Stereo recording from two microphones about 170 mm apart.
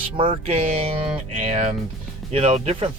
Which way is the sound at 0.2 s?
35° right (ahead or behind).